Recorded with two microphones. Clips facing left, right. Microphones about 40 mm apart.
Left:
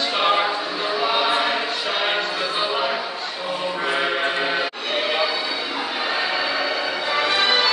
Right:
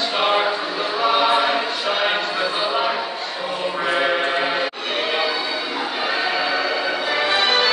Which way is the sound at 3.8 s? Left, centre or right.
Centre.